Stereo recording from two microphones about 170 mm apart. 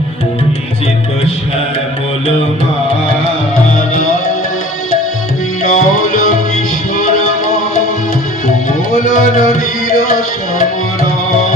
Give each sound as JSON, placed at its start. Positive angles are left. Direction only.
{"t": 5.6, "sound": "music", "side_deg": 55}
{"t": 9.0, "sound": "music", "side_deg": 55}